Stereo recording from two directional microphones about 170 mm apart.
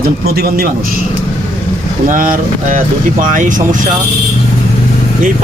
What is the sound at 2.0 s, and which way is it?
Speech, 50° right (ahead or behind).